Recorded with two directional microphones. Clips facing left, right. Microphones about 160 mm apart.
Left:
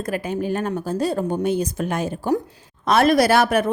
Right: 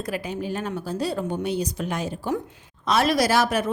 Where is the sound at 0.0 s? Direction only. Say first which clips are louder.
Left 4 dB; 50° left (ahead or behind).